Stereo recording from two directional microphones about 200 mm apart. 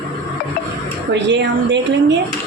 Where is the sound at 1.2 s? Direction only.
65° right (ahead or behind).